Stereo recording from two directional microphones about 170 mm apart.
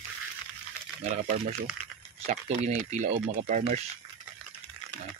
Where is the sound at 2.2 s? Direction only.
45° right (ahead or behind).